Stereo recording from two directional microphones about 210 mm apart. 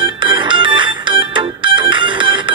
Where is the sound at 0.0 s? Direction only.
20° right (ahead or behind).